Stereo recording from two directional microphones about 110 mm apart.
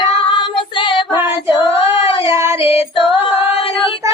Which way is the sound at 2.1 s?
50° left (ahead or behind).